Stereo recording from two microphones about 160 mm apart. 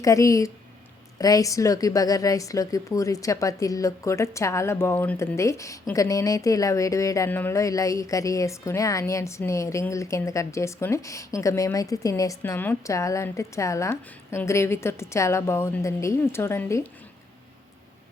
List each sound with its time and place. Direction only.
0.0 s a woman's voice: 20° left (ahead or behind)